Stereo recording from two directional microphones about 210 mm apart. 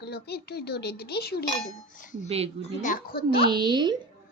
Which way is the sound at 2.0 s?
40° left (ahead or behind).